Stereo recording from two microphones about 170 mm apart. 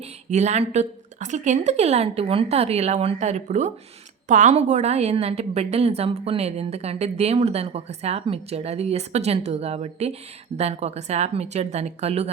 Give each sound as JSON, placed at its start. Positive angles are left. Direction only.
{"t": 0.0, "sound": "a woman's voice", "side_deg": -40}